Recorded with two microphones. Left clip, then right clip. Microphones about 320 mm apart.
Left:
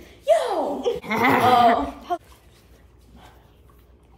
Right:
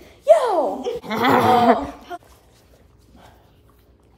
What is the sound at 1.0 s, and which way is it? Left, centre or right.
Laughter, centre.